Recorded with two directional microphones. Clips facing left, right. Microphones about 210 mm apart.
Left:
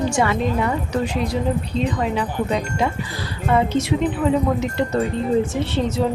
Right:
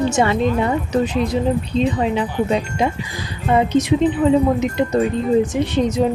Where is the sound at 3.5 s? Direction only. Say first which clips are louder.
Right 3 dB; 20° right (ahead or behind).